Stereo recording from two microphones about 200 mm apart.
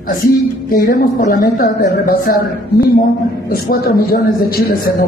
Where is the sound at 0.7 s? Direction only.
45° left (ahead or behind).